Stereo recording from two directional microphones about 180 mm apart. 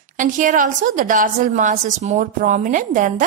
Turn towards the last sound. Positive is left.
turn(degrees=-45)  # may be behind; listen again after turning